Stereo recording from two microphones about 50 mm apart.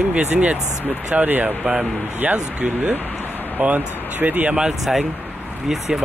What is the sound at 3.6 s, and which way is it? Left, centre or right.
Speech, right.